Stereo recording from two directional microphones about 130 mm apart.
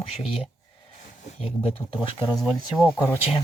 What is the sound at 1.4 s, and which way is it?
Speech, 45° left (ahead or behind).